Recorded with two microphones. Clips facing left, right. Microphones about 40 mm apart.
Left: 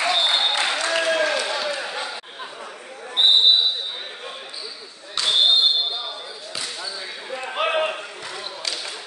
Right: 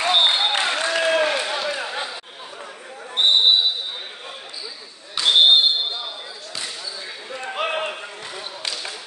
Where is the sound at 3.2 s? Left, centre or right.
Centre.